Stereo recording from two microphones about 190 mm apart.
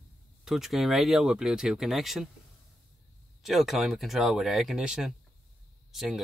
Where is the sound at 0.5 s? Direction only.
Centre (ahead or behind).